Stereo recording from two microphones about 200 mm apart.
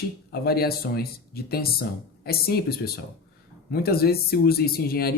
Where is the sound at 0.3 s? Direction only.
50° left (ahead or behind).